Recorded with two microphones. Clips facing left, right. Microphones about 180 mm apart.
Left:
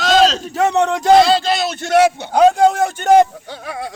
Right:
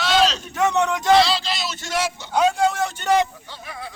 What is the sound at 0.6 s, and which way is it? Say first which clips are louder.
Speech: left 4 dB; 30° left (ahead or behind).